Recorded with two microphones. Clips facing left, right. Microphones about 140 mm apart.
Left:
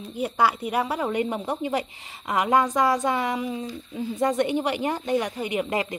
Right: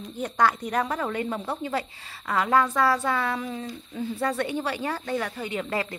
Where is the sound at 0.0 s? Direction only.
10° left (ahead or behind).